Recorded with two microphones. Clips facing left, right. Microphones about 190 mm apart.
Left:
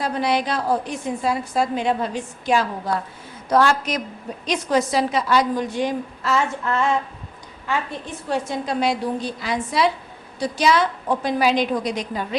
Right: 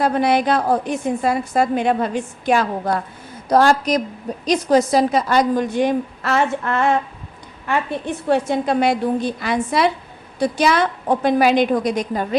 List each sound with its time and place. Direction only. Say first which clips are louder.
0.0 s a woman's voice: right 5 dB; 55° right (ahead or behind)
3.5 s a woman's voice: right 4 dB; 40° right (ahead or behind)